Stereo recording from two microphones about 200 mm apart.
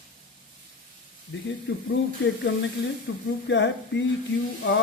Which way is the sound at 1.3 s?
65° left (ahead or behind).